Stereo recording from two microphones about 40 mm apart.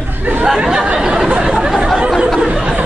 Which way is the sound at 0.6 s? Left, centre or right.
Centre.